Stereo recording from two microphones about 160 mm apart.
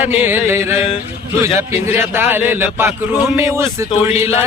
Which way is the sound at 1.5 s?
40° left (ahead or behind).